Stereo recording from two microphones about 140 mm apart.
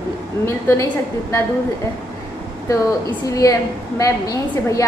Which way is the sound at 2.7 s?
25° left (ahead or behind).